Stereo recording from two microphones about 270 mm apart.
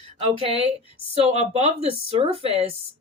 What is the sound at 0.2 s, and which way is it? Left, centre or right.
Speech, right.